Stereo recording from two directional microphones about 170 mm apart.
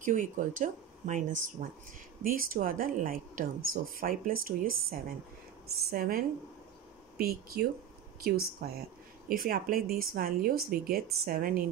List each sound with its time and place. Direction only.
0.0 s speech: 50° right (ahead or behind)
5.9 s speech: 60° right (ahead or behind)